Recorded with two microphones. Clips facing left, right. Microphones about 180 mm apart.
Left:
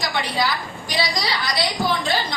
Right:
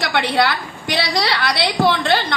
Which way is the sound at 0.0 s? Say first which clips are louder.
Right 5 dB; 65° right (ahead or behind).